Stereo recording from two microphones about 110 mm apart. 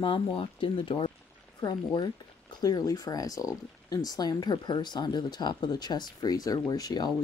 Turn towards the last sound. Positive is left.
turn(degrees=35)  # may be behind; listen again after turning